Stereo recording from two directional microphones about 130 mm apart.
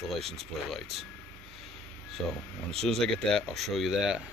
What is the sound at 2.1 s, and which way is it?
Speech, 5° left (ahead or behind).